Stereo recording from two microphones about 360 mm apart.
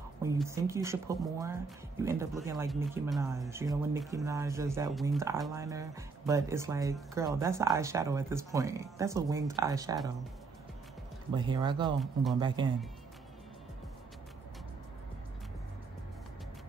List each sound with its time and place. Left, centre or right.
0.2 s speech: centre
11.3 s speech: centre
12.0 s speech: centre
12.4 s speech: centre